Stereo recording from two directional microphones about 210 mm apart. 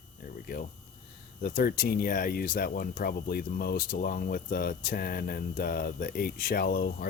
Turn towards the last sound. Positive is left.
turn(degrees=45)  # may be behind; listen again after turning